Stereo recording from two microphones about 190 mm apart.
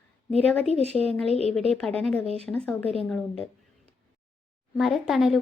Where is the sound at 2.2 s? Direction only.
30° right (ahead or behind).